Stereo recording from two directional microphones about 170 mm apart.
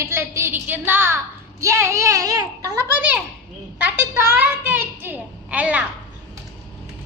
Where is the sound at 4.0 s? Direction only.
15° right (ahead or behind).